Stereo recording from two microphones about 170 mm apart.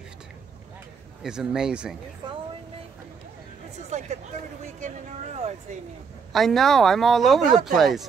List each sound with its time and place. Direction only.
1.2 s speech: 5° right (ahead or behind)
3.9 s speech: 45° right (ahead or behind)
6.3 s speech: centre (ahead or behind)